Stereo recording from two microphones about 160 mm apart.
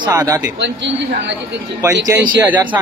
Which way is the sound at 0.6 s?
90° right.